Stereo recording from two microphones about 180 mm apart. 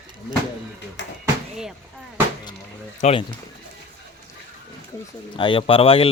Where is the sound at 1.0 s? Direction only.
90° left.